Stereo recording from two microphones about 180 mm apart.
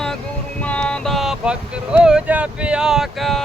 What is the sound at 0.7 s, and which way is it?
Boat, 5° left (ahead or behind).